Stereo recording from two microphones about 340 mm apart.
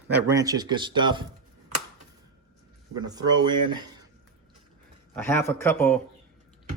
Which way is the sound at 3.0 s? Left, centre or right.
Centre.